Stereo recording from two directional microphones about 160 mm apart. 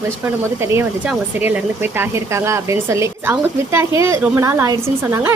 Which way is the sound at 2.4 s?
15° right (ahead or behind).